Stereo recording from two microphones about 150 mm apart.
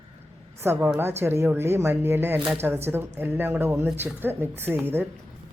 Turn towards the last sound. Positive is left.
turn(degrees=-15)  # may be behind; listen again after turning